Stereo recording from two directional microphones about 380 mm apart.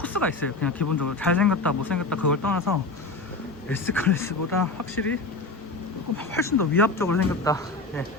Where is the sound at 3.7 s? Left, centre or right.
Centre.